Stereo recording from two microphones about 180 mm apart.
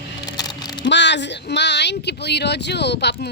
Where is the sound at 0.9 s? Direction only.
80° left.